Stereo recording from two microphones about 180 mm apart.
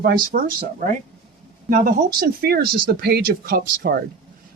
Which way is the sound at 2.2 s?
60° right (ahead or behind).